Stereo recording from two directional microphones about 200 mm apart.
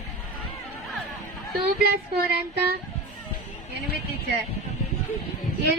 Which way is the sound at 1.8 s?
50° right (ahead or behind).